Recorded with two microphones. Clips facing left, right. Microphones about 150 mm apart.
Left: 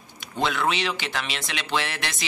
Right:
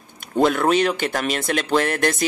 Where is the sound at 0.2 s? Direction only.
50° right (ahead or behind).